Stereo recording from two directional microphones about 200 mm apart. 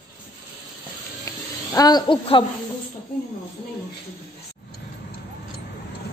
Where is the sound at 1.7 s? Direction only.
20° left (ahead or behind).